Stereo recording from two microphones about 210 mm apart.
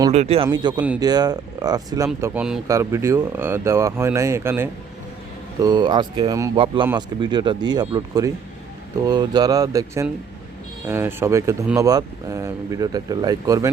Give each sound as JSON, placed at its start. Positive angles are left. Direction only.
{"t": 0.1, "sound": "speech", "side_deg": -30}
{"t": 2.2, "sound": "speech", "side_deg": -5}